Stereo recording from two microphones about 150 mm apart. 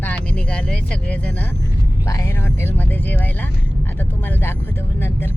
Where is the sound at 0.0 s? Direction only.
10° left (ahead or behind).